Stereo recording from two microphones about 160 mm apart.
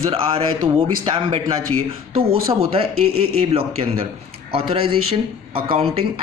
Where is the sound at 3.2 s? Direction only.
40° right (ahead or behind).